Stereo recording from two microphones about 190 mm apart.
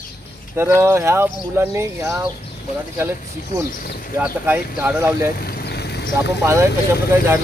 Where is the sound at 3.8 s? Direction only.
50° left (ahead or behind).